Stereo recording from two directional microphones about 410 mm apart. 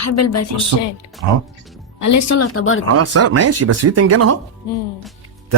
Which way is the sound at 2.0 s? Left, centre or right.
Left.